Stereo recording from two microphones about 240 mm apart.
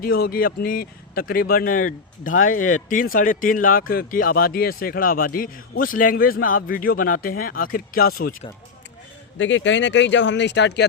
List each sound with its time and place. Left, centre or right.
0.0 s speech: left
9.4 s speech: left